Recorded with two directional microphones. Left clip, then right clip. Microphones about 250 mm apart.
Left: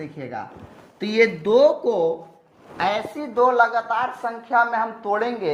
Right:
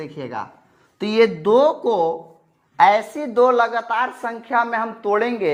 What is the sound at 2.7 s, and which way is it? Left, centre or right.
A woman's voice, right.